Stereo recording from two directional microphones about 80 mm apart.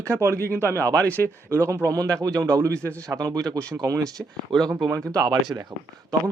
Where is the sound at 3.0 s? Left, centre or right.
Right.